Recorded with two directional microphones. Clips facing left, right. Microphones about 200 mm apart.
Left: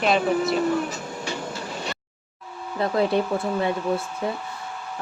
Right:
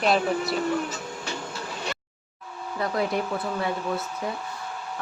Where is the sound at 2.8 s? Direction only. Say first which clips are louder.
Left 5 dB; 30° left (ahead or behind).